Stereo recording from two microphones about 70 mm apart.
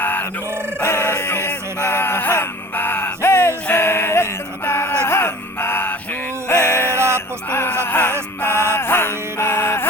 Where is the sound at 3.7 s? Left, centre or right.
Left.